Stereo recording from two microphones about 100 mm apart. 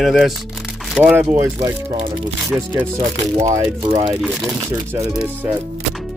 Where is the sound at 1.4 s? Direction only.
35° right (ahead or behind).